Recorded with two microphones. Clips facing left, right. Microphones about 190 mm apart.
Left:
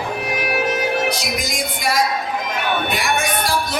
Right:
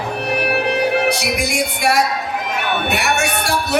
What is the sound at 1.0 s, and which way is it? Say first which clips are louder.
Music: right 4 dB; 65° right (ahead or behind).